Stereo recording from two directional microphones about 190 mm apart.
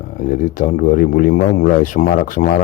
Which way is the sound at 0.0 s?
50° left (ahead or behind).